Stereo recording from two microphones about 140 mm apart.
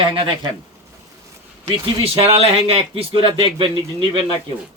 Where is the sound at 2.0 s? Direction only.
45° right (ahead or behind).